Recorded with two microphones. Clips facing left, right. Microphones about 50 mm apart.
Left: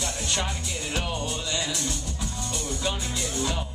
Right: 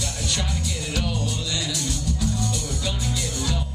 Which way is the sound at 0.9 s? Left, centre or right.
Left.